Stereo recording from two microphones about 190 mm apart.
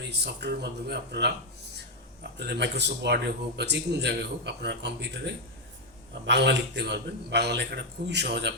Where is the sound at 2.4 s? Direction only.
60° right (ahead or behind).